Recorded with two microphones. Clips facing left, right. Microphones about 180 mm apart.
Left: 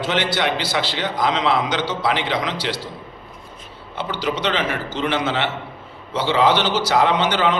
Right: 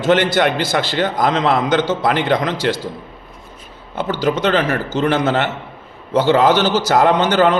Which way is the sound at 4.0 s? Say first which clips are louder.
Right 6 dB; 45° right (ahead or behind).